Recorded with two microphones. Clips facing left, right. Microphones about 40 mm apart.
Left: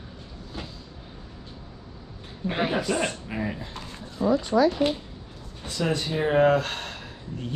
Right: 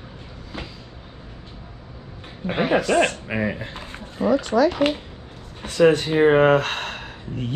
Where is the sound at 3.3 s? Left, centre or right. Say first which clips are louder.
Right 6 dB; right.